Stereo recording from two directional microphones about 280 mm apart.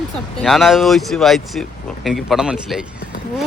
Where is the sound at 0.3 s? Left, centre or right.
Centre.